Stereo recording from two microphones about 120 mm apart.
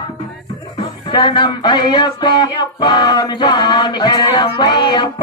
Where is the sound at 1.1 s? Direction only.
40° left (ahead or behind).